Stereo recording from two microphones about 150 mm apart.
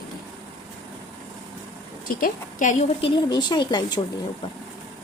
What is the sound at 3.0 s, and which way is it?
Speech, 30° left (ahead or behind).